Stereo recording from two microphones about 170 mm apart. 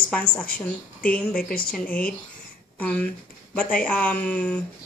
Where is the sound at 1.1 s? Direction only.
5° left (ahead or behind).